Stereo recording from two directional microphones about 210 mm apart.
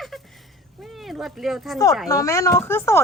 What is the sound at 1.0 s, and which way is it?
Speech, centre (ahead or behind).